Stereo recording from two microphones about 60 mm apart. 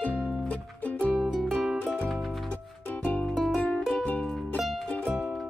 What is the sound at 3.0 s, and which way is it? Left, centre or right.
Music, left.